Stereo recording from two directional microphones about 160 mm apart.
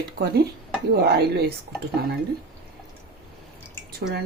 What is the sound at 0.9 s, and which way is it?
Speech, 80° right.